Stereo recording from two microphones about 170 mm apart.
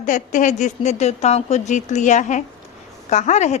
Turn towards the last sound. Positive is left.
turn(degrees=45)  # may be behind; listen again after turning